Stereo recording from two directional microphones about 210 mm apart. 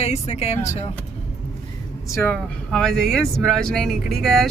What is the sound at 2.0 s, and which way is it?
Speech, 10° left (ahead or behind).